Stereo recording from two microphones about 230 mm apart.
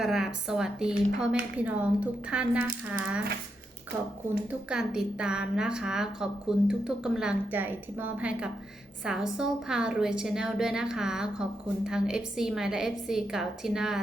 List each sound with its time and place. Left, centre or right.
0.0 s a woman's voice: centre
4.7 s a woman's voice: centre